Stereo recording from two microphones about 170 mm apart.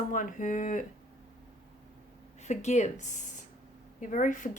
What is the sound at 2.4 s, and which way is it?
Speech, 40° left (ahead or behind).